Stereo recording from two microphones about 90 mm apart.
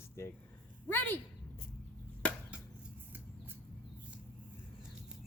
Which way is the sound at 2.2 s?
15° left (ahead or behind).